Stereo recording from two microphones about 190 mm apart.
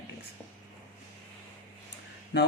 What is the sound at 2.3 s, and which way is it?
Speech, 65° left (ahead or behind).